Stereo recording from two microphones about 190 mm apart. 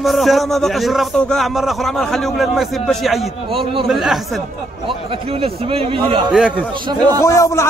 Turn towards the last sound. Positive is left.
turn(degrees=15)  # may be behind; listen again after turning